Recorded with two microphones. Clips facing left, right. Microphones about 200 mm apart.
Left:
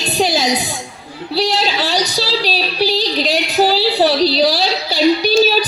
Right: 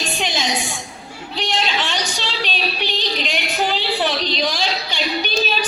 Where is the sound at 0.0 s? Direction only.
35° left (ahead or behind).